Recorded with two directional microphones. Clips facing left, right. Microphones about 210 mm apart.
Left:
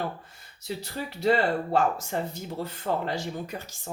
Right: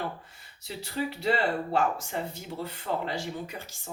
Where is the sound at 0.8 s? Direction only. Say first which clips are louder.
Right 5 dB; 45° left (ahead or behind).